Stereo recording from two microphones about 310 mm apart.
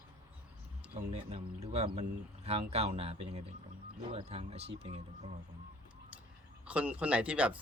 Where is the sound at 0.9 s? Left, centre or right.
Centre.